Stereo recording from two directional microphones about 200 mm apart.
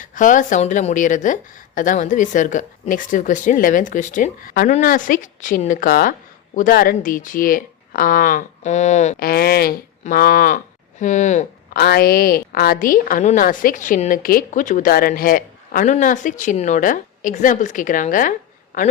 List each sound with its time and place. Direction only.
0.0 s a woman's voice: 40° left (ahead or behind)
9.1 s a woman's voice: 50° left (ahead or behind)